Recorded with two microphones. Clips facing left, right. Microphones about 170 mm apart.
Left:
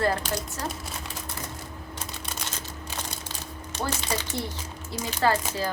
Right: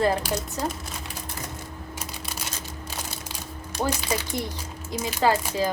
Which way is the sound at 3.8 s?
10° right (ahead or behind).